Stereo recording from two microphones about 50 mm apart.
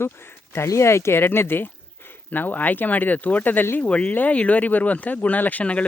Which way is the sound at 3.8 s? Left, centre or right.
Left.